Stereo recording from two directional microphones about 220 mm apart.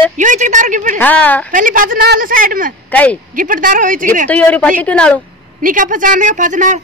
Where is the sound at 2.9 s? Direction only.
5° left (ahead or behind).